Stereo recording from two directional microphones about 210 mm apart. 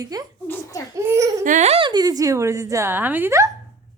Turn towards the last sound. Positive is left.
turn(degrees=-10)  # may be behind; listen again after turning